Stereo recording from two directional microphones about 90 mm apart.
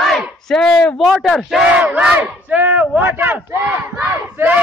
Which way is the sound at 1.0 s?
Centre (ahead or behind).